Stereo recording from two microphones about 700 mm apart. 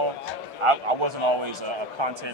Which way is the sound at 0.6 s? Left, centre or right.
Right.